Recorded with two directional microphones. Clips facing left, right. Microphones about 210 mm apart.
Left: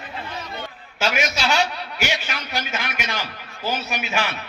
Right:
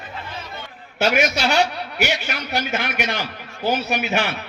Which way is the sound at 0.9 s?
55° right (ahead or behind).